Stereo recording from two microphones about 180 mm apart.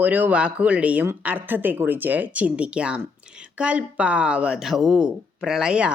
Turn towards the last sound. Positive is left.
turn(degrees=-5)  # may be behind; listen again after turning